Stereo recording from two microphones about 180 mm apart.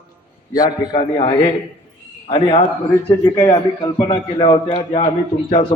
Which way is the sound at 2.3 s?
25° left (ahead or behind).